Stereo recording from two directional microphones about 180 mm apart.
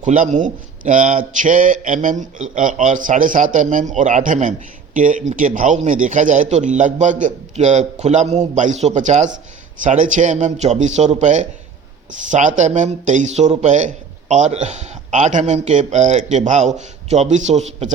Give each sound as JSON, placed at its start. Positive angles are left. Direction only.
{"t": 0.0, "sound": "speech", "side_deg": -45}